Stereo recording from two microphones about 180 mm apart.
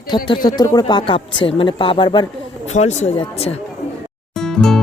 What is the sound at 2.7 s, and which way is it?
Speech, 40° left (ahead or behind).